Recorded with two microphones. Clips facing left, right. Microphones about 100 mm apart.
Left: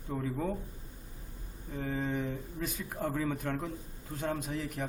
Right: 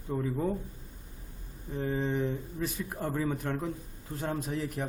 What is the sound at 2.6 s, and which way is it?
A man's voice, centre (ahead or behind).